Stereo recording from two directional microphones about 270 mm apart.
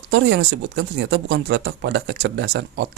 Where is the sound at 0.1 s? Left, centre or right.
Right.